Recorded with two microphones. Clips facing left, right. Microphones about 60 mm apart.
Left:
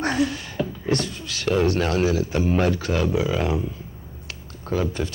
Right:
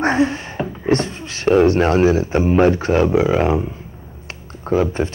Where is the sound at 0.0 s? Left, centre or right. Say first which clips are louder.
Right 6 dB; right.